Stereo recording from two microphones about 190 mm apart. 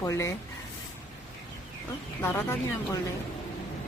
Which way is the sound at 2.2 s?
10° left (ahead or behind).